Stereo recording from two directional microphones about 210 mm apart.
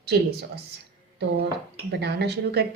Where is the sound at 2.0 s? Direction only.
50° right (ahead or behind).